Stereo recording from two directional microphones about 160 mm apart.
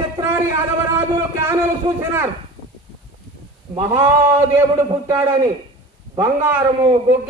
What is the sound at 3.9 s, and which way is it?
A man's voice, 15° right (ahead or behind).